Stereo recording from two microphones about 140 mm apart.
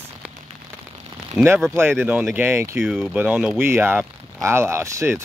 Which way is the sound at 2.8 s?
5° right (ahead or behind).